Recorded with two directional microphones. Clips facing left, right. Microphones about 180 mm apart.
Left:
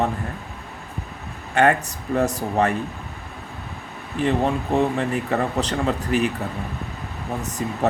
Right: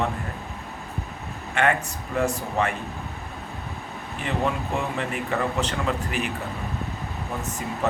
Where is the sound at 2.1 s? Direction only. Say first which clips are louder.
Left 4 dB; 35° left (ahead or behind).